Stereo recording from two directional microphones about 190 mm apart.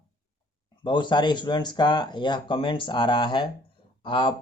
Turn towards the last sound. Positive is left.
turn(degrees=25)  # may be behind; listen again after turning